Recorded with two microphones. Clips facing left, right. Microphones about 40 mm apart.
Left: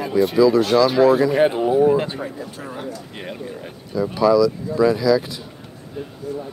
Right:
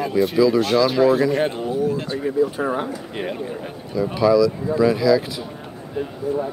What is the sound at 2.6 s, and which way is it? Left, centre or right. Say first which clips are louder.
Speech: right 8 dB; right.